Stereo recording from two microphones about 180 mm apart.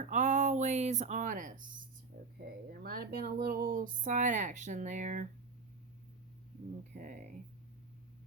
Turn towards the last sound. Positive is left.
turn(degrees=-45)  # may be behind; listen again after turning